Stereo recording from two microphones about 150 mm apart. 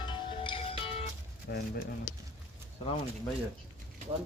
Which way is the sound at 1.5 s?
90° left.